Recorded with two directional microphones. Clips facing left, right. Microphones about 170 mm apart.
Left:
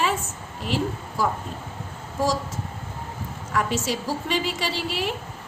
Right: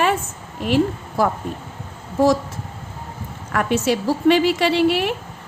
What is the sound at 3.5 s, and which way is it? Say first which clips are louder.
A woman's voice: right 6 dB; 60° right (ahead or behind).